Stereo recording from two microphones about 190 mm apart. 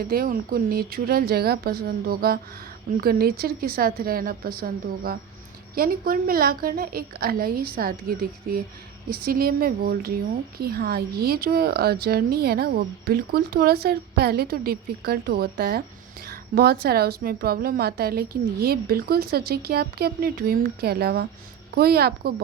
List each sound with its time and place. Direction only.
0.0 s a woman's voice: 50° right (ahead or behind)